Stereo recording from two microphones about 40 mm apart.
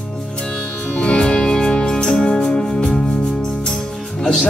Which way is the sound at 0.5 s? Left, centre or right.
Left.